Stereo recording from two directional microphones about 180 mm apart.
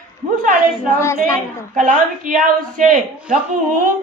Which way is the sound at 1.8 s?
45° right (ahead or behind).